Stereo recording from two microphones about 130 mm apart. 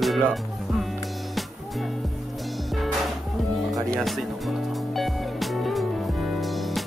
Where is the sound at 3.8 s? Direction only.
Centre (ahead or behind).